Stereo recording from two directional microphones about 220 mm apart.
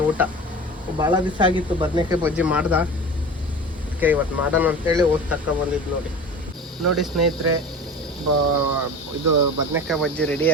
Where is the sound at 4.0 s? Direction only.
5° right (ahead or behind).